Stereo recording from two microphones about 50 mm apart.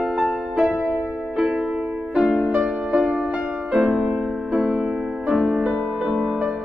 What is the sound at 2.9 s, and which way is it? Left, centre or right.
Music, centre.